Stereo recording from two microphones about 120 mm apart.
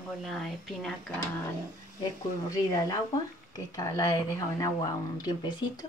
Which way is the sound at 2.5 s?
30° left (ahead or behind).